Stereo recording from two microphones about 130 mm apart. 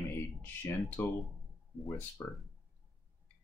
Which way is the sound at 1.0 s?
15° left (ahead or behind).